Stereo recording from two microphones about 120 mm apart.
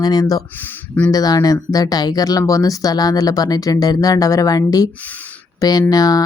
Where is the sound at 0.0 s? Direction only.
35° left (ahead or behind).